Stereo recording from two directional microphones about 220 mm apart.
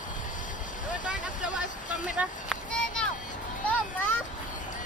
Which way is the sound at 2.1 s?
5° right (ahead or behind).